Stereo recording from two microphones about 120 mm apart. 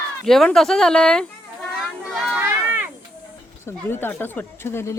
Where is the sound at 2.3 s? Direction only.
15° right (ahead or behind).